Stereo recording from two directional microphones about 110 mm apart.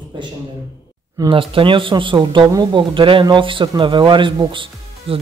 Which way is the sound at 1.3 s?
55° right (ahead or behind).